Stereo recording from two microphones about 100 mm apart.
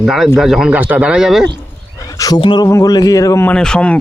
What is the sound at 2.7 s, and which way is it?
Speech, 35° left (ahead or behind).